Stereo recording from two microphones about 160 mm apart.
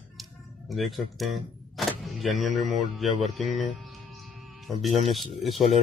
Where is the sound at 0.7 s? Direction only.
Centre (ahead or behind).